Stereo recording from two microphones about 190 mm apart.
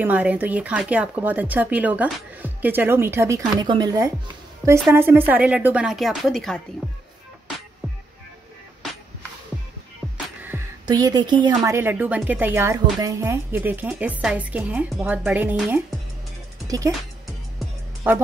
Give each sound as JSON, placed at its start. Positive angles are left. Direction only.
{"t": 0.0, "sound": "speech", "side_deg": -10}
{"t": 10.1, "sound": "music", "side_deg": -10}
{"t": 10.9, "sound": "speech", "side_deg": -20}
{"t": 16.6, "sound": "speech", "side_deg": -20}
{"t": 18.1, "sound": "speech", "side_deg": -10}